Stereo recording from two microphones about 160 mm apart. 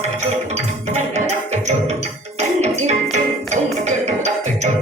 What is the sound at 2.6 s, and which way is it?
Music, 45° right (ahead or behind).